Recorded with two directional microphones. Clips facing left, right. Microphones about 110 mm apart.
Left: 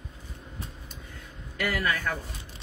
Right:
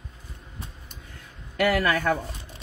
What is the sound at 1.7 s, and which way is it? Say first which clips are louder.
Speech: right 5 dB; 60° right (ahead or behind).